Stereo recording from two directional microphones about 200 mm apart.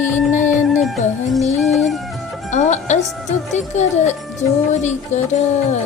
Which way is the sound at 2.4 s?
35° left (ahead or behind).